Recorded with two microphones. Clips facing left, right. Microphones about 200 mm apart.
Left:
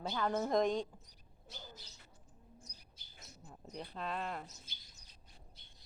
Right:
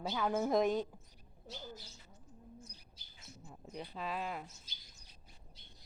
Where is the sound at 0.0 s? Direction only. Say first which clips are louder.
Right 1 dB; 5° right (ahead or behind).